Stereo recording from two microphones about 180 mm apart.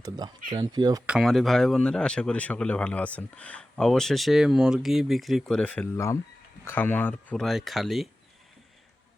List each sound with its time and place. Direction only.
0.6 s speech: 20° right (ahead or behind)
1.0 s speech: centre (ahead or behind)